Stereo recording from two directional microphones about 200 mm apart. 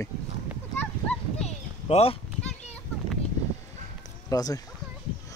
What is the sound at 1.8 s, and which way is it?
Speech, 30° left (ahead or behind).